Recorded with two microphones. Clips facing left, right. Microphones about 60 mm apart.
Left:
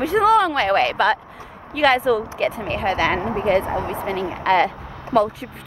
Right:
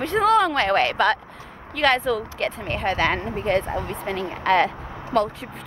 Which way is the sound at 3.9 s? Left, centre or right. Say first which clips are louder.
Left 3 dB; centre.